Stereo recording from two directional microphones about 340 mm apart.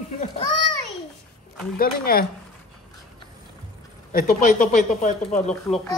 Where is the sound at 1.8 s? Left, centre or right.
Left.